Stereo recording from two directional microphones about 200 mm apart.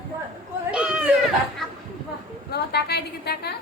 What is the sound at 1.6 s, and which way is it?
Chatter, centre (ahead or behind).